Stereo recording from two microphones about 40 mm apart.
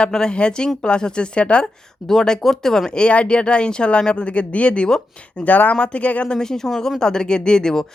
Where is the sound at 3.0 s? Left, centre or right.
Left.